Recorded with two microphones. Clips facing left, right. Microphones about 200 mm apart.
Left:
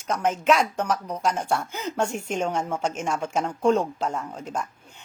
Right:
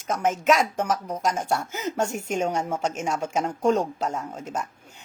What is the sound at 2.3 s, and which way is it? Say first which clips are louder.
Speech: right 1 dB; 10° right (ahead or behind).